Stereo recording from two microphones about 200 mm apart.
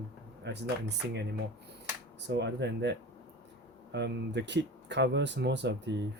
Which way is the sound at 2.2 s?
60° right (ahead or behind).